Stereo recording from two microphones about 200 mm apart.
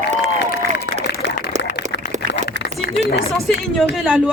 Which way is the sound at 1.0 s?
60° left (ahead or behind).